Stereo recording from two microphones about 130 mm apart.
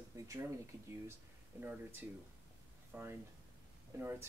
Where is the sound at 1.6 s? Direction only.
15° right (ahead or behind).